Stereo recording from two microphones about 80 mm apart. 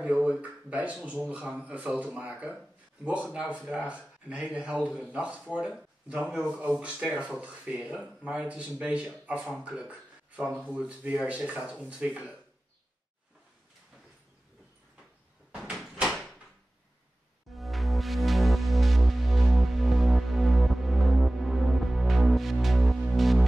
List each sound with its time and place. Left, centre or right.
0.0 s speech: centre
15.7 s door: centre
17.6 s music: centre